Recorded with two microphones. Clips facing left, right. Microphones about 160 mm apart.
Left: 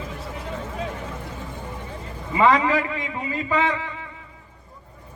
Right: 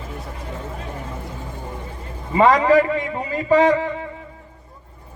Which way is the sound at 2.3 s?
40° right (ahead or behind).